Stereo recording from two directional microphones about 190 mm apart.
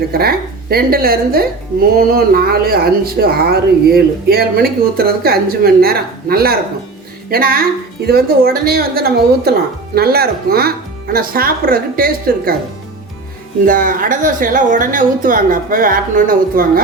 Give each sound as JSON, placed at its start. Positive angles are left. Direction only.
{"t": 0.1, "sound": "speech", "side_deg": -55}
{"t": 13.7, "sound": "speech", "side_deg": -45}